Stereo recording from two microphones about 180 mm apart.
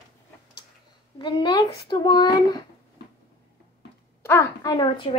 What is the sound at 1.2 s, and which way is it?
Speech, 25° left (ahead or behind).